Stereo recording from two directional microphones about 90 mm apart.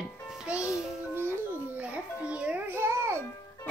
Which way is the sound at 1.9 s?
15° right (ahead or behind).